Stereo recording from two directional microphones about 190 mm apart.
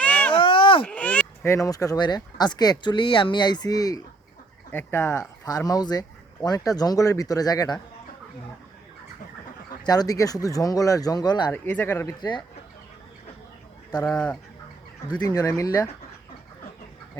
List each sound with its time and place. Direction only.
0.0 s a sound: 10° left (ahead or behind)
0.3 s a sound: 25° left (ahead or behind)
0.9 s speech: 10° left (ahead or behind)
9.8 s speech: 20° left (ahead or behind)
11.5 s speech: 10° left (ahead or behind)
13.9 s speech: 10° left (ahead or behind)
15.2 s speech: 20° left (ahead or behind)